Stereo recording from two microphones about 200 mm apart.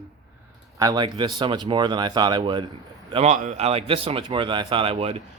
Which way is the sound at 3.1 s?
35° right (ahead or behind).